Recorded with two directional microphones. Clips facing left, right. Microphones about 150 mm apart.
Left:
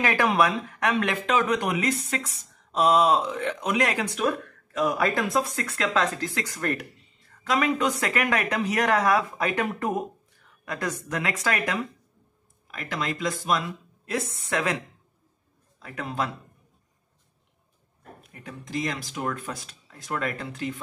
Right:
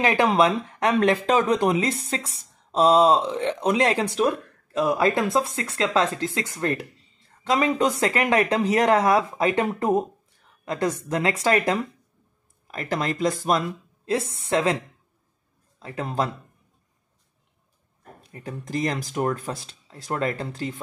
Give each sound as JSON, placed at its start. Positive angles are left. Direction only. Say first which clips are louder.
{"t": 0.0, "sound": "speech", "louder": "right 3 dB", "side_deg": -25}
{"t": 14.0, "sound": "speech", "louder": "right 4 dB", "side_deg": -30}
{"t": 15.8, "sound": "speech", "louder": "right 4 dB", "side_deg": -30}
{"t": 18.2, "sound": "a sound", "louder": "right 9 dB", "side_deg": -30}
{"t": 18.6, "sound": "speech", "louder": "right 4 dB", "side_deg": -45}